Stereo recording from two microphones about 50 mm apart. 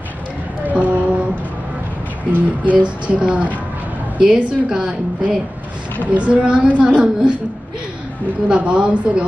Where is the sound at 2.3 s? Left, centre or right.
Right.